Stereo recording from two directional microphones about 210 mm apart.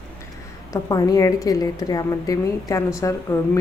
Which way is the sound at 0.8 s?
15° left (ahead or behind).